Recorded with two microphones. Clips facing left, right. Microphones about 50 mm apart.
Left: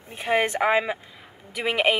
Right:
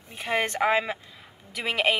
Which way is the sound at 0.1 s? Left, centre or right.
Centre.